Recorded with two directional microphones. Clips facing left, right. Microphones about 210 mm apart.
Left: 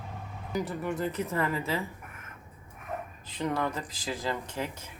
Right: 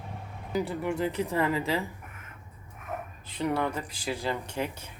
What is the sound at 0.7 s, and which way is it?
Speech, 15° right (ahead or behind).